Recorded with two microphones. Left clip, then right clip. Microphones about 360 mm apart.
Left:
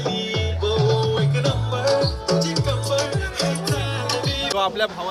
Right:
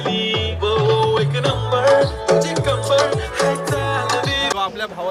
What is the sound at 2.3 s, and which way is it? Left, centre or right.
Music, right.